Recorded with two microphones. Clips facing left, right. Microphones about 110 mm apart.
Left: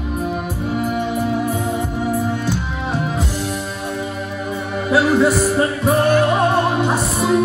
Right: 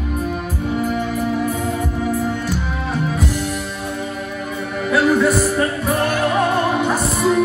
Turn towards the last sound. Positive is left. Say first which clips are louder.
# even
turn(degrees=30)  # may be behind; listen again after turning